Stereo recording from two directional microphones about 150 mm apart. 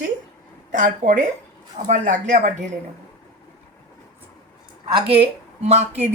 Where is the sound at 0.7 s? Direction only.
55° right (ahead or behind).